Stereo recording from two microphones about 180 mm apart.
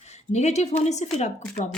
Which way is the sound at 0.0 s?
40° left (ahead or behind).